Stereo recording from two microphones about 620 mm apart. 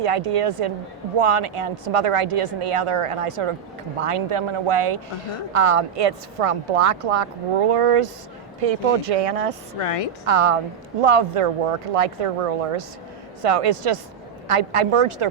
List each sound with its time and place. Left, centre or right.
0.0 s a woman's voice: right
9.7 s a woman's voice: left
10.2 s a woman's voice: right